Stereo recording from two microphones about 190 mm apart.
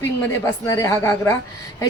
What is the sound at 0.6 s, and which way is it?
Speech, 15° left (ahead or behind).